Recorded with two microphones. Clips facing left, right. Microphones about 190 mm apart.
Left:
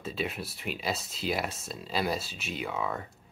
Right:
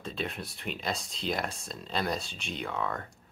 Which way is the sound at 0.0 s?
5° left (ahead or behind).